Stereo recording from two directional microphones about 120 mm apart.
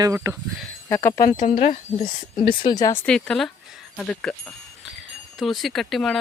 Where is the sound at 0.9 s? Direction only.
20° left (ahead or behind).